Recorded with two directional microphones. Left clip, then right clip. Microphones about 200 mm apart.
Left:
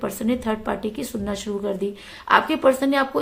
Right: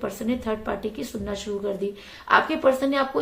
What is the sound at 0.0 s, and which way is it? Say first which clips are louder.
A woman's voice: left 3 dB; 35° left (ahead or behind).